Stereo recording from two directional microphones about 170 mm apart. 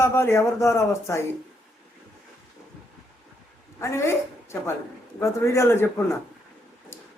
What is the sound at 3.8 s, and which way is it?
A woman's voice, 15° left (ahead or behind).